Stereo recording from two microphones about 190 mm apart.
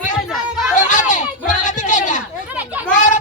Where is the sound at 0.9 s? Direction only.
40° left (ahead or behind).